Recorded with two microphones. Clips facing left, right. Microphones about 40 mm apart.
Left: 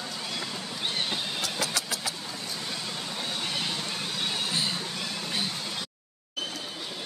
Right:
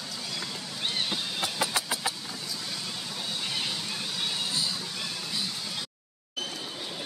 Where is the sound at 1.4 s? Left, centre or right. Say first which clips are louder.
Right 1 dB; right.